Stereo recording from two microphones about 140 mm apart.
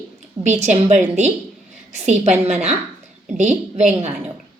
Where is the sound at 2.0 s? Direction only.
55° right (ahead or behind).